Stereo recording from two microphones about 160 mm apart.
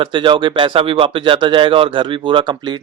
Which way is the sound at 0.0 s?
30° right (ahead or behind).